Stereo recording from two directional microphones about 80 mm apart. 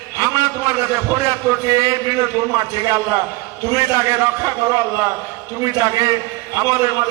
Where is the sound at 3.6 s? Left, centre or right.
Right.